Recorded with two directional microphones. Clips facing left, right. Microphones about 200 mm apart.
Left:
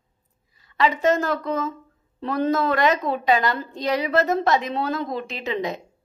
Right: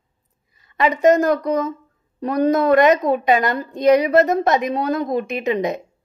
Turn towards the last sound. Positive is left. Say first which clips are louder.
# right 6 dB
turn(degrees=-20)  # may be behind; listen again after turning